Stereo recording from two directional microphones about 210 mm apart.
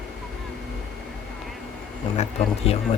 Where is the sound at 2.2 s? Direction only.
30° left (ahead or behind).